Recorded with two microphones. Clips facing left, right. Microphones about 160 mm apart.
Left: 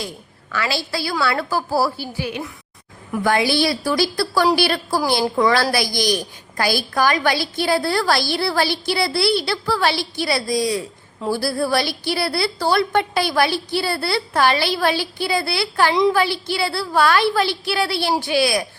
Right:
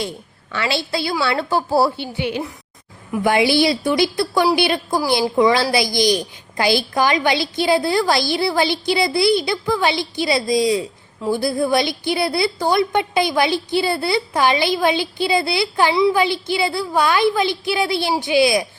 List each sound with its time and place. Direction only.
0.5 s a woman's voice: 25° right (ahead or behind)